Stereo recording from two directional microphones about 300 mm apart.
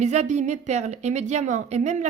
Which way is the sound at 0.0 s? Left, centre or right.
Right.